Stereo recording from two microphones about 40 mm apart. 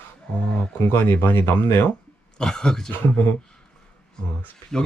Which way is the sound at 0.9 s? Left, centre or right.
Left.